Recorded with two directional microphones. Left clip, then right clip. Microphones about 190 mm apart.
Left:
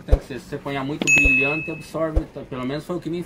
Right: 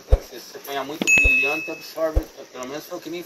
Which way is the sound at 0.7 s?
Centre (ahead or behind).